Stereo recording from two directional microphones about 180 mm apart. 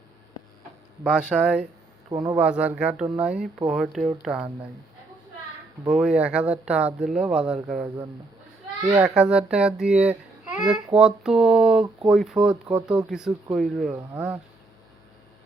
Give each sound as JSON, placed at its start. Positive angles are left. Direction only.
{"t": 1.0, "sound": "speech", "side_deg": -5}
{"t": 2.0, "sound": "speech", "side_deg": -20}
{"t": 2.4, "sound": "speech", "side_deg": -5}
{"t": 5.9, "sound": "speech", "side_deg": -5}
{"t": 9.0, "sound": "speech", "side_deg": -5}